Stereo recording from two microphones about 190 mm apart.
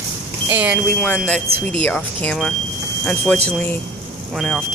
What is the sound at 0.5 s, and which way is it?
Speech, 5° right (ahead or behind).